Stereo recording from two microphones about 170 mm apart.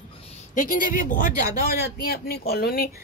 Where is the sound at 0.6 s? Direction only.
55° left (ahead or behind).